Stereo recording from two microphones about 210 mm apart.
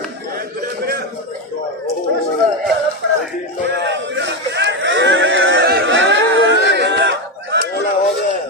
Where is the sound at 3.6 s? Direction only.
55° right (ahead or behind).